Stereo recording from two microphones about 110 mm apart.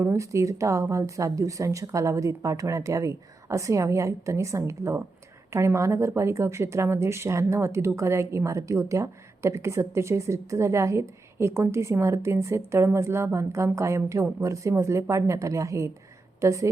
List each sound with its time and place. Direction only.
0.0 s speech: 30° right (ahead or behind)